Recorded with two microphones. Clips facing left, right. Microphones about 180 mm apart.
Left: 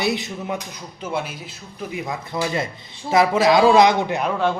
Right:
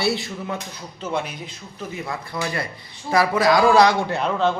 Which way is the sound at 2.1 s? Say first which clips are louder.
Left 3 dB; 20° left (ahead or behind).